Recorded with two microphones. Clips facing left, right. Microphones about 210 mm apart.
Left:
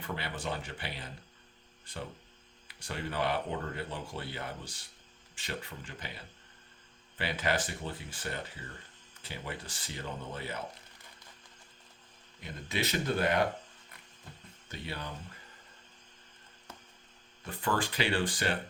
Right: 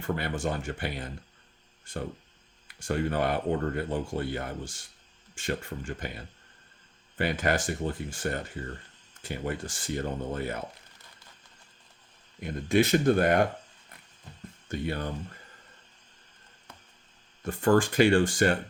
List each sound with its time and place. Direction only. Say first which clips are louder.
0.0 s speech: right 8 dB; 50° right (ahead or behind)
12.4 s speech: right 11 dB; 50° right (ahead or behind)
14.7 s speech: right 9 dB; 50° right (ahead or behind)
17.4 s speech: right 10 dB; 45° right (ahead or behind)